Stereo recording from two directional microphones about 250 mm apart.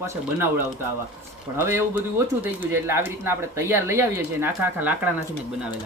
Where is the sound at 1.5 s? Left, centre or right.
Centre.